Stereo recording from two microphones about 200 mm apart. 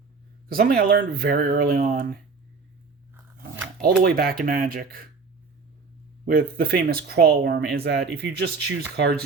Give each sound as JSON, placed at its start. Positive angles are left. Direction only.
{"t": 0.4, "sound": "speech", "side_deg": -45}
{"t": 3.2, "sound": "biting", "side_deg": -10}
{"t": 4.0, "sound": "speech", "side_deg": -50}
{"t": 6.2, "sound": "speech", "side_deg": -50}